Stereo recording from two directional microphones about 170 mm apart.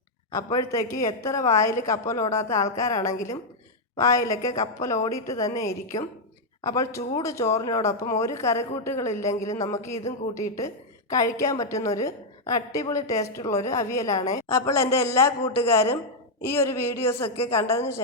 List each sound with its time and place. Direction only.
0.3 s a woman's voice: 20° left (ahead or behind)